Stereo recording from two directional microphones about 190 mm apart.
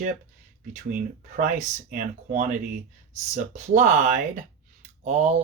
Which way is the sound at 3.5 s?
40° right (ahead or behind).